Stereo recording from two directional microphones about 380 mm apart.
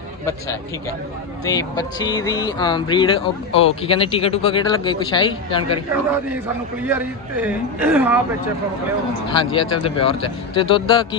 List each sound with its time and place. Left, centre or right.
1.5 s speech: centre
6.8 s a man's voice: centre
9.2 s speech: centre